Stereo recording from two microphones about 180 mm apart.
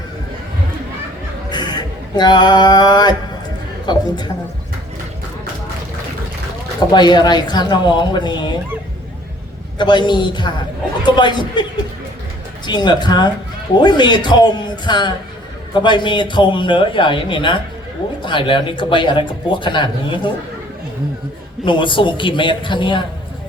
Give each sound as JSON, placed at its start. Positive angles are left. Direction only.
{"t": 1.5, "sound": "music", "side_deg": 25}
{"t": 3.9, "sound": "speech", "side_deg": 25}
{"t": 6.7, "sound": "speech", "side_deg": 25}
{"t": 9.7, "sound": "speech", "side_deg": 25}
{"t": 12.6, "sound": "speech", "side_deg": 25}
{"t": 21.6, "sound": "speech", "side_deg": 25}